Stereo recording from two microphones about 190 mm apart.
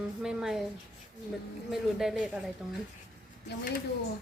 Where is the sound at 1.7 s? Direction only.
Centre (ahead or behind).